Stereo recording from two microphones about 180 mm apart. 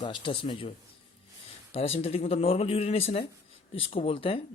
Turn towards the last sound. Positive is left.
turn(degrees=30)  # may be behind; listen again after turning